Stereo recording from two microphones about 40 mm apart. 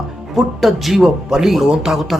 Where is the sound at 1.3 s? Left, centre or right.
Centre.